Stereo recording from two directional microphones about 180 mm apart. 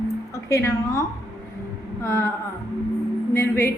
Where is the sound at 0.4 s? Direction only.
15° left (ahead or behind).